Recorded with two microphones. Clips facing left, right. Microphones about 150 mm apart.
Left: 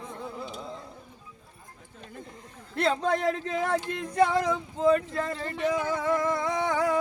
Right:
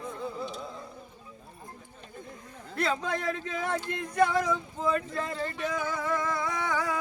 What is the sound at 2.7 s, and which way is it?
A man's voice, 25° left (ahead or behind).